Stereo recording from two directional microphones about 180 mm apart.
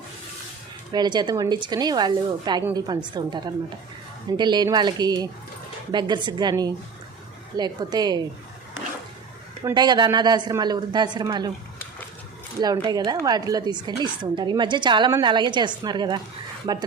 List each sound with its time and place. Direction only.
0.9 s speech: 25° right (ahead or behind)
9.6 s speech: 25° right (ahead or behind)
12.5 s speech: 20° right (ahead or behind)